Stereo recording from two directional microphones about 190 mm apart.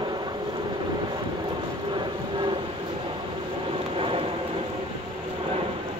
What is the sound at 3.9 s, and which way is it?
Vehicle, 30° right (ahead or behind).